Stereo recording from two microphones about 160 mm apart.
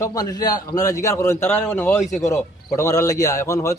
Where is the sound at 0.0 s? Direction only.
20° left (ahead or behind).